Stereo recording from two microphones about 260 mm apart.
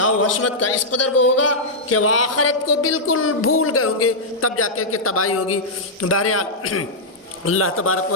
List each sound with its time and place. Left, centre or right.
0.0 s a man's voice: left